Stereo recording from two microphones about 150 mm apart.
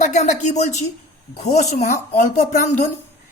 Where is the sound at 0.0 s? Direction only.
50° left (ahead or behind).